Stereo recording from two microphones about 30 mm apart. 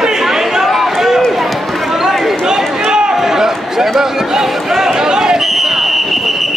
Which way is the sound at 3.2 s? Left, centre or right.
Centre.